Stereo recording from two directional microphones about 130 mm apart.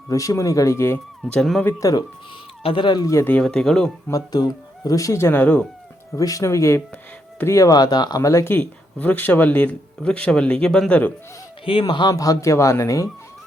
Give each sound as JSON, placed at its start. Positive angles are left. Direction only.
{"t": 0.1, "sound": "speech", "side_deg": 25}
{"t": 1.2, "sound": "speech", "side_deg": 5}
{"t": 1.6, "sound": "speech", "side_deg": 25}
{"t": 2.6, "sound": "speech", "side_deg": 40}
{"t": 3.4, "sound": "speech", "side_deg": 5}
{"t": 4.1, "sound": "speech", "side_deg": 30}
{"t": 6.1, "sound": "speech", "side_deg": 25}
{"t": 11.6, "sound": "speech", "side_deg": 40}